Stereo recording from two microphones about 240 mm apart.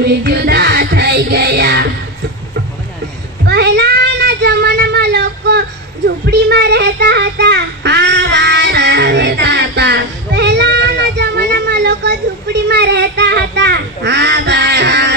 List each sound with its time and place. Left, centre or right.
0.0 s music: right
3.4 s child singing: right